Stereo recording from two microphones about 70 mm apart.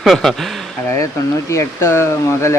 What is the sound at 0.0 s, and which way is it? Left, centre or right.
Speech, centre.